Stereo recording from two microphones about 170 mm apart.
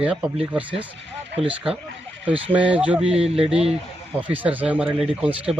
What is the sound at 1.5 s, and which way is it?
Speech, 5° right (ahead or behind).